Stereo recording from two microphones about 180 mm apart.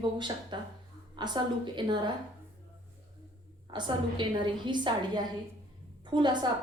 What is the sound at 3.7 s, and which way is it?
A woman's voice, 25° right (ahead or behind).